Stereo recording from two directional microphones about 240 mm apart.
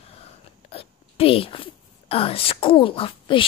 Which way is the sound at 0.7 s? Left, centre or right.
Left.